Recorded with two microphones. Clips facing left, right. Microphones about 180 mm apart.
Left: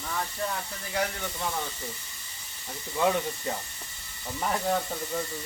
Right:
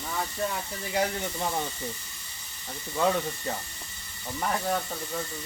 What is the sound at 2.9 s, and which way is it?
Speech, 5° left (ahead or behind).